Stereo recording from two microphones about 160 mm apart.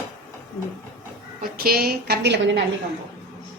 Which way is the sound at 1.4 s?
70° right (ahead or behind).